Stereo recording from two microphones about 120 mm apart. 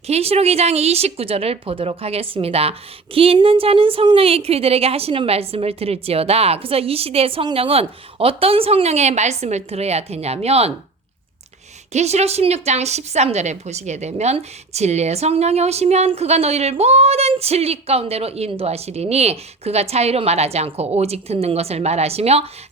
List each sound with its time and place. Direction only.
0.1 s a woman's voice: 60° right (ahead or behind)
11.9 s a woman's voice: 65° right (ahead or behind)